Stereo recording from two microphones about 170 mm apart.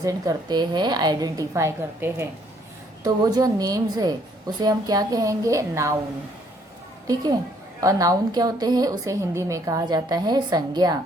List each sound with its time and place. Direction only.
0.0 s a woman's voice: 20° right (ahead or behind)
7.8 s a woman's voice: 20° right (ahead or behind)